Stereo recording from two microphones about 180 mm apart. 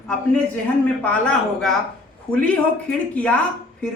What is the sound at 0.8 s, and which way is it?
A woman's voice, 5° left (ahead or behind).